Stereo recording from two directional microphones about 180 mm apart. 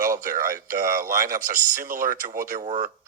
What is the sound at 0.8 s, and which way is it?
Speech, 50° right (ahead or behind).